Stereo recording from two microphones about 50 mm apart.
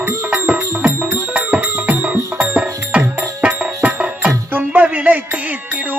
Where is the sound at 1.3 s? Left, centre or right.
Right.